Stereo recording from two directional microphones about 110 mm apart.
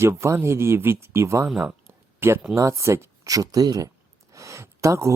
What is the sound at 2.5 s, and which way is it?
Speech, 30° right (ahead or behind).